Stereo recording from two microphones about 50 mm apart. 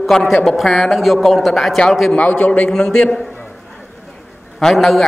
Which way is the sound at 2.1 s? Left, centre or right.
Left.